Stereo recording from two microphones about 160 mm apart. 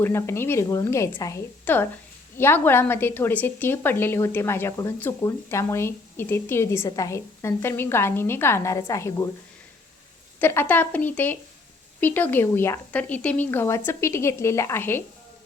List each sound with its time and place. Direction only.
0.0 s a woman's voice: 15° left (ahead or behind)
10.4 s a woman's voice: 15° left (ahead or behind)